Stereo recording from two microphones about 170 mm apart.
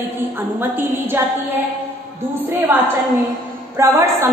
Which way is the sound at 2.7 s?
10° right (ahead or behind).